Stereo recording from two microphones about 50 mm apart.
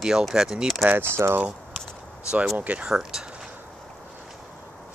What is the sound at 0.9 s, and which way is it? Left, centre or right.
Speech, right.